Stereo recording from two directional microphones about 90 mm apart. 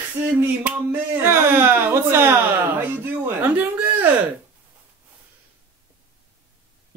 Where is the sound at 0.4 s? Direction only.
20° right (ahead or behind).